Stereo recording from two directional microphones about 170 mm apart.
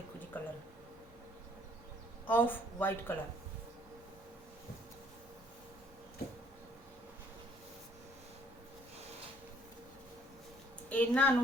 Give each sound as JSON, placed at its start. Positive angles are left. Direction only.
{"t": 0.3, "sound": "a sound", "side_deg": 10}
{"t": 2.2, "sound": "speech", "side_deg": 10}
{"t": 10.8, "sound": "a woman's voice", "side_deg": 10}